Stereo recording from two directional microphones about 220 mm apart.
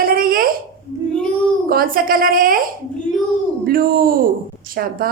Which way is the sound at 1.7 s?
40° right (ahead or behind).